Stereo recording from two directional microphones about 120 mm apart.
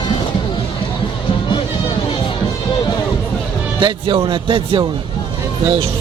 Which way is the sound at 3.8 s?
40° right (ahead or behind).